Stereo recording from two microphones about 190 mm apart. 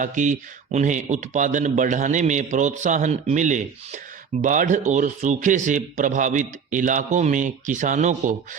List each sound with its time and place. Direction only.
0.0 s speech: 40° right (ahead or behind)